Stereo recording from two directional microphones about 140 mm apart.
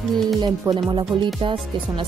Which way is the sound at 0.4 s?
30° right (ahead or behind).